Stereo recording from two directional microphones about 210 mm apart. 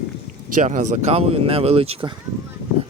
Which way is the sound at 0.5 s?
40° right (ahead or behind).